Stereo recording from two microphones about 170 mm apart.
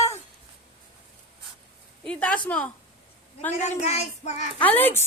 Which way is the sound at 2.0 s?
5° left (ahead or behind).